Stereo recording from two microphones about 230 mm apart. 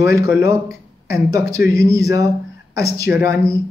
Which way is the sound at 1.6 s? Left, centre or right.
Left.